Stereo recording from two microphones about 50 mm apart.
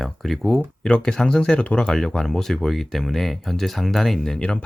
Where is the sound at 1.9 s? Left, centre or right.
Centre.